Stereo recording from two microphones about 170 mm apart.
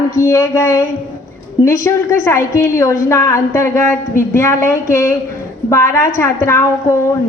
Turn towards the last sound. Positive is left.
turn(degrees=15)  # may be behind; listen again after turning